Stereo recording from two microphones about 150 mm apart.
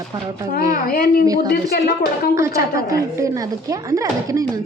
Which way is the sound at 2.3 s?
20° right (ahead or behind).